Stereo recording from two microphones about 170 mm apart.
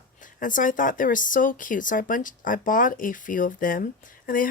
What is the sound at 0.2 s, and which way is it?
Speech, 50° left (ahead or behind).